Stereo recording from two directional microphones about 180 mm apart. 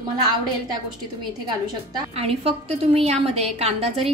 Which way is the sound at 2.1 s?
30° right (ahead or behind).